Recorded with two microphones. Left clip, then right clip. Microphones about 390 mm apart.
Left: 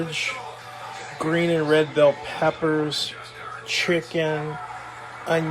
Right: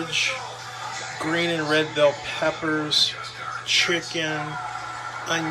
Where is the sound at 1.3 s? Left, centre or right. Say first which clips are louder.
Left 3 dB; centre.